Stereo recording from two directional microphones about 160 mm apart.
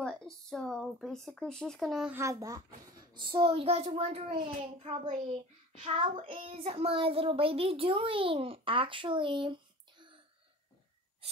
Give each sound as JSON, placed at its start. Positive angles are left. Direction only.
{"t": 0.0, "sound": "speech", "side_deg": 5}
{"t": 2.1, "sound": "a child's voice", "side_deg": -20}